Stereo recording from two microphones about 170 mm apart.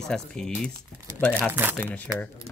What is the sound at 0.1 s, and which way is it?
Speech, 5° left (ahead or behind).